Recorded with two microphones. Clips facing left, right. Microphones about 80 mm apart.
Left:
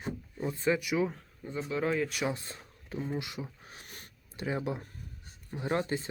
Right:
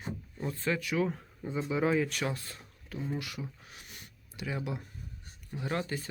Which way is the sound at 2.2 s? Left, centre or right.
Centre.